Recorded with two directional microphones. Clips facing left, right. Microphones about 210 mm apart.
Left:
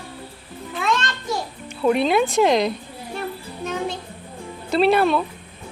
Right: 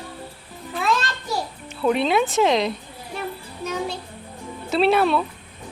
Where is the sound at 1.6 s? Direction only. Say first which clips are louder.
Left 2 dB; centre (ahead or behind).